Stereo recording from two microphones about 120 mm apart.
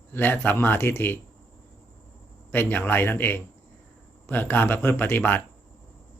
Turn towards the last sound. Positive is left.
turn(degrees=15)  # may be behind; listen again after turning